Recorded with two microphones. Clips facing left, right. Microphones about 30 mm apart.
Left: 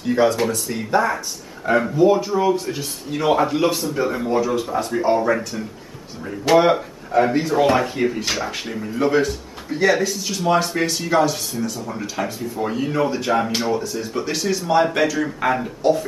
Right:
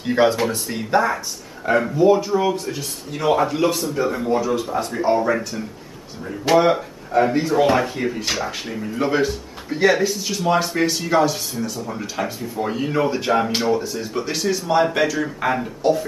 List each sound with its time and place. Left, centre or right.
0.0 s speech: right
1.7 s speech: centre